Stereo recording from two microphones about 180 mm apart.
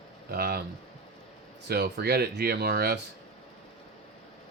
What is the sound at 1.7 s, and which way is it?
Speech, 65° right (ahead or behind).